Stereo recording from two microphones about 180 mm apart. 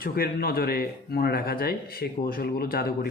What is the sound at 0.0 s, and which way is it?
Speech, 55° left (ahead or behind).